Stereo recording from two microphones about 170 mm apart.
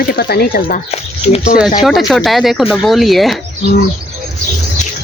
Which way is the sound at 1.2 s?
35° left (ahead or behind).